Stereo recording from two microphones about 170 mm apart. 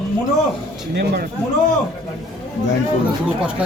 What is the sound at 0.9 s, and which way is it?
Speech, 70° right (ahead or behind).